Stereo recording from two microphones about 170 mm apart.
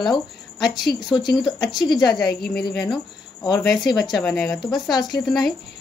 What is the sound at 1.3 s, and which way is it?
Speech, centre (ahead or behind).